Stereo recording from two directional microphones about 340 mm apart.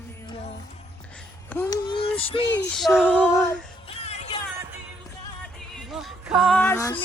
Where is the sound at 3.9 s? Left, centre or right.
Centre.